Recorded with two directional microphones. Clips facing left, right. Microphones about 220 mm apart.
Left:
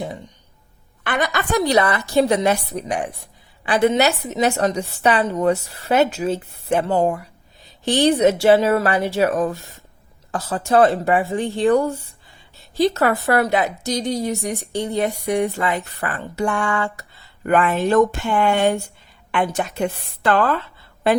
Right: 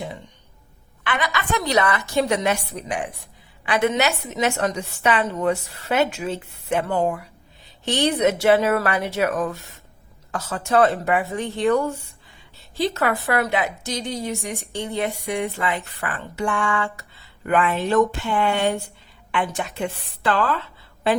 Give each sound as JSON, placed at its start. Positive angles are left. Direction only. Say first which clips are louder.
{"t": 1.0, "sound": "a woman's voice", "louder": "left 3 dB", "side_deg": 40}